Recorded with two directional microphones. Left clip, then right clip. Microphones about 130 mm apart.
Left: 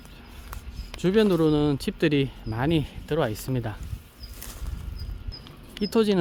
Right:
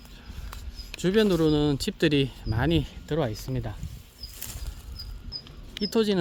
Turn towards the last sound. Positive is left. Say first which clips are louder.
# left 2 dB
turn(degrees=5)  # may be behind; listen again after turning